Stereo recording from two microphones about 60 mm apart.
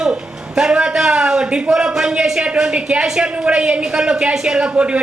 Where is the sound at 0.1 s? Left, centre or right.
Centre.